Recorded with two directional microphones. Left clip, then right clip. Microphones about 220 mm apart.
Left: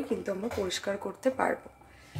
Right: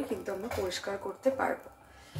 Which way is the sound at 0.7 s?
55° left (ahead or behind).